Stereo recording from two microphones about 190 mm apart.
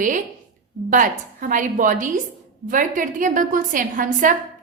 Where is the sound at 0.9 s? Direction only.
45° right (ahead or behind).